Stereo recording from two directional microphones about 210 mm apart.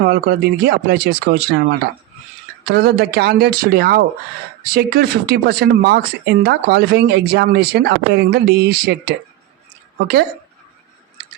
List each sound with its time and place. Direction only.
0.0 s speech: 50° right (ahead or behind)
2.6 s speech: 50° right (ahead or behind)